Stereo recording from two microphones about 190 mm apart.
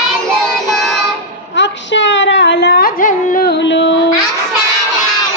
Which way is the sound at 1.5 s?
70° left (ahead or behind).